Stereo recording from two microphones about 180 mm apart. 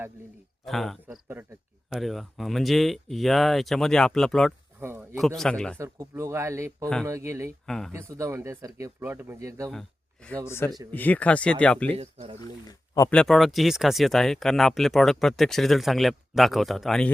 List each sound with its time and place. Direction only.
0.6 s speech: centre (ahead or behind)
1.0 s speech: 10° right (ahead or behind)
4.8 s a sound: 15° right (ahead or behind)
5.2 s speech: centre (ahead or behind)
5.7 s speech: 15° right (ahead or behind)
7.7 s speech: 5° left (ahead or behind)
7.9 s speech: 15° right (ahead or behind)
10.2 s speech: 10° left (ahead or behind)
11.9 s speech: 35° right (ahead or behind)
12.4 s speech: 20° left (ahead or behind)
13.1 s speech: 5° left (ahead or behind)